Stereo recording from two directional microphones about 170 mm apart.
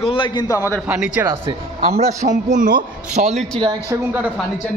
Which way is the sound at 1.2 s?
20° right (ahead or behind).